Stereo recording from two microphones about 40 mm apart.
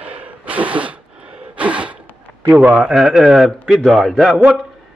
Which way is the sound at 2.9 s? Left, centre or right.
Centre.